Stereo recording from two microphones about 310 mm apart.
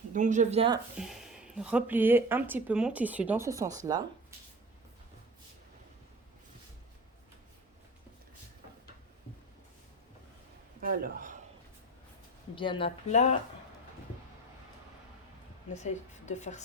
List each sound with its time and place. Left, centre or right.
0.1 s speech: right
0.9 s speech: centre
10.8 s a sound: right
12.5 s speech: centre
15.7 s a woman's voice: left